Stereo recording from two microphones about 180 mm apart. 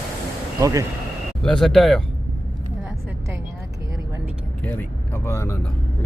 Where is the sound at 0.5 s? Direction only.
20° right (ahead or behind).